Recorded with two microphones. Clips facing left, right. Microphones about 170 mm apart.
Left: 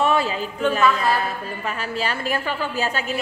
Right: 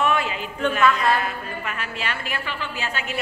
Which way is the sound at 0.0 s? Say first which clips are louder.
Left 3 dB; 35° left (ahead or behind).